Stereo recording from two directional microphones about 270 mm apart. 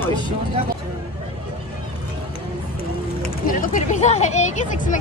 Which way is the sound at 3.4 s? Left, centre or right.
Left.